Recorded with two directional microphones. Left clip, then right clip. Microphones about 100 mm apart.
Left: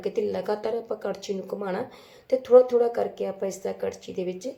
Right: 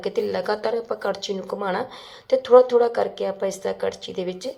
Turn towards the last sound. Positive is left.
turn(degrees=15)  # may be behind; listen again after turning